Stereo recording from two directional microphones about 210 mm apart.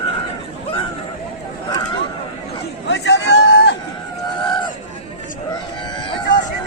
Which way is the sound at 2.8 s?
60° left (ahead or behind).